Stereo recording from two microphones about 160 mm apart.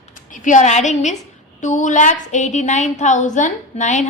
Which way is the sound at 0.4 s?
50° left (ahead or behind).